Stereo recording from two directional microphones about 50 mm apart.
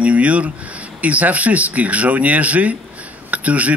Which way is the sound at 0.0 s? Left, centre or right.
Right.